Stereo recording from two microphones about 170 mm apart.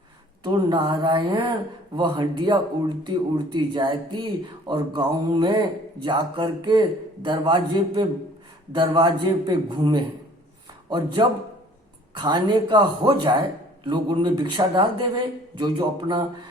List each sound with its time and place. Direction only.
0.4 s a man's voice: 25° right (ahead or behind)